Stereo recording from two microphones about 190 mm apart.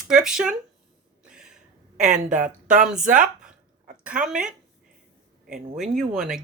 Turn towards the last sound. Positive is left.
turn(degrees=0)  # may be behind; listen again after turning